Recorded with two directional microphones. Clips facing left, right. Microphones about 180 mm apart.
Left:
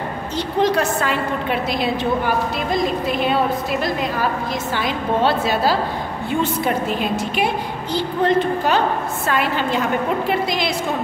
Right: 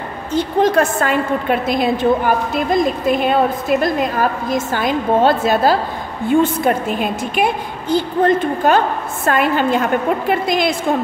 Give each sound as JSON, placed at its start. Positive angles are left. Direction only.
{"t": 0.3, "sound": "a woman's voice", "side_deg": -50}